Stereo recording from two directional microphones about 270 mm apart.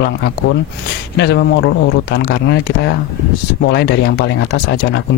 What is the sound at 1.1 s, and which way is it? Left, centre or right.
Speech, left.